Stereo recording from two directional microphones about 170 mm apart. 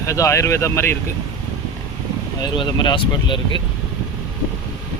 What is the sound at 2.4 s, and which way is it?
Speech, 25° left (ahead or behind).